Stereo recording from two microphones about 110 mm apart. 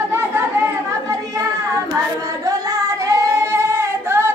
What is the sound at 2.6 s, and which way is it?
Female singing, 25° right (ahead or behind).